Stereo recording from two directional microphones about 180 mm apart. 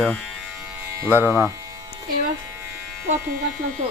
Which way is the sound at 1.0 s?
10° right (ahead or behind).